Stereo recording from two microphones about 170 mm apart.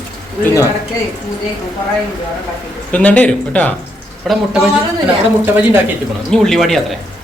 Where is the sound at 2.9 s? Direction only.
10° left (ahead or behind).